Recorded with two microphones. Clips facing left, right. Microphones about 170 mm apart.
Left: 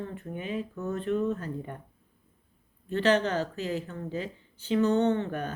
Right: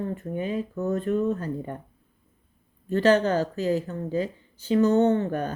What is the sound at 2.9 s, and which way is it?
Speech, 40° right (ahead or behind).